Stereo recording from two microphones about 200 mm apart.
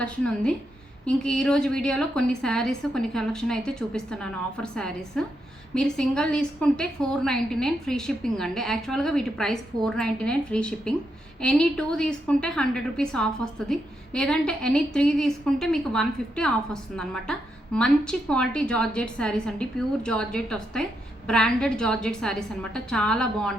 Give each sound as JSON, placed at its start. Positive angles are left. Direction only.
{"t": 0.0, "sound": "a woman's voice", "side_deg": 5}